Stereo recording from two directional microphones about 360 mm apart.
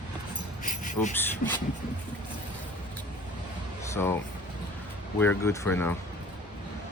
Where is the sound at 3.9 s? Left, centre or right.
Centre.